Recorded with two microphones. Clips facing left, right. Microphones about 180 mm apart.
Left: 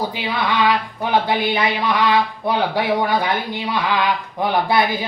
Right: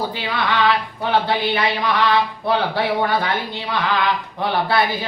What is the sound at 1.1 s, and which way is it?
A man's voice, 15° left (ahead or behind).